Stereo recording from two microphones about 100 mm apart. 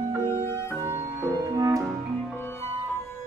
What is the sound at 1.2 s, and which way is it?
Music, 30° right (ahead or behind).